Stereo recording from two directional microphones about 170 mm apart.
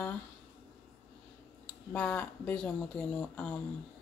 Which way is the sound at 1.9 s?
10° left (ahead or behind).